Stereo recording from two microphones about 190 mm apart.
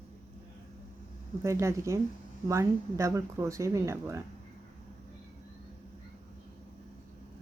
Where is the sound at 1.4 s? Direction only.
15° right (ahead or behind).